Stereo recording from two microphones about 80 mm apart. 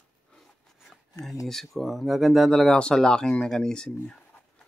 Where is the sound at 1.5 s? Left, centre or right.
Centre.